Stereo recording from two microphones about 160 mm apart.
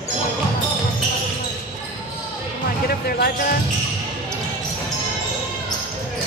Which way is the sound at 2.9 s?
70° left (ahead or behind).